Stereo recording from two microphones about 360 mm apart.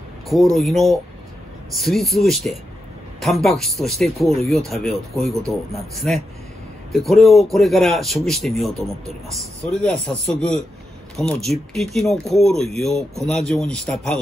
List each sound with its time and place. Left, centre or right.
0.3 s a man's voice: centre